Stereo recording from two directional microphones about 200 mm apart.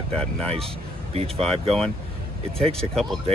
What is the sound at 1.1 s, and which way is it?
Speech, 30° right (ahead or behind).